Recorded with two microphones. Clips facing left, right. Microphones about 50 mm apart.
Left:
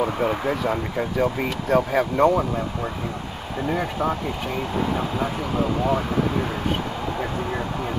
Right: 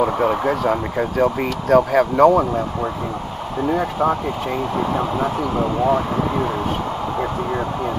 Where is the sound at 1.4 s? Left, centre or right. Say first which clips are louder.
Right 5 dB; right.